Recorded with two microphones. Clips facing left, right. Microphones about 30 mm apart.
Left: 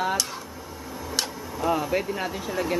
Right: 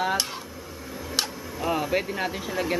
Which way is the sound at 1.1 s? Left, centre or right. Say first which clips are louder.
Right 1 dB; centre.